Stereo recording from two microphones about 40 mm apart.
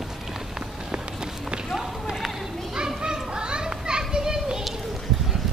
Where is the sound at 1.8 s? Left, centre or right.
Centre.